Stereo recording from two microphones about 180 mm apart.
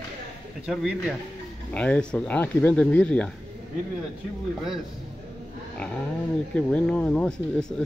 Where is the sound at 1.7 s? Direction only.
5° left (ahead or behind).